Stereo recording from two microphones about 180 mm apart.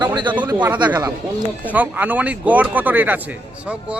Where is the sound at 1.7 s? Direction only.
10° right (ahead or behind).